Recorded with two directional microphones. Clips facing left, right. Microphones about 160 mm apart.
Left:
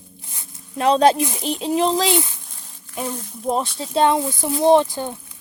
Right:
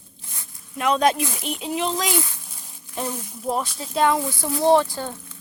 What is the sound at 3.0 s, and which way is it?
Speech, 5° right (ahead or behind).